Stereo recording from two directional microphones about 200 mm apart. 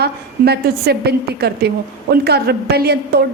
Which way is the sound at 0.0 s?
55° right (ahead or behind).